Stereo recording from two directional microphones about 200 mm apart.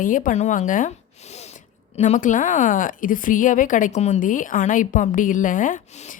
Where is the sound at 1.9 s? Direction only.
35° left (ahead or behind).